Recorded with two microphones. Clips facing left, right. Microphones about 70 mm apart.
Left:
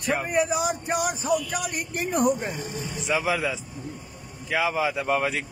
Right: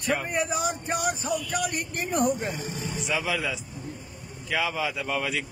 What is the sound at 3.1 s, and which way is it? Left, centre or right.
Speech, left.